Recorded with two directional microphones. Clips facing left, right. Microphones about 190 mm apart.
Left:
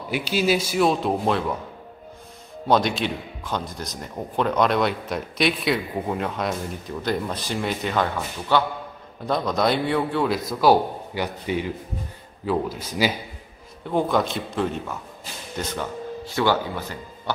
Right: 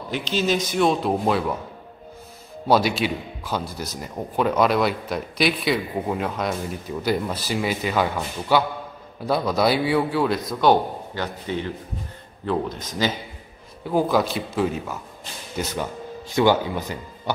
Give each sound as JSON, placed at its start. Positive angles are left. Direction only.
{"t": 0.1, "sound": "a man's voice", "side_deg": 10}
{"t": 2.7, "sound": "a man's voice", "side_deg": -5}
{"t": 13.8, "sound": "a man's voice", "side_deg": -5}